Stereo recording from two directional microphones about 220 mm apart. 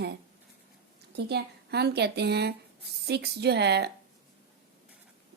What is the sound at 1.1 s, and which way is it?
Speech, 50° right (ahead or behind).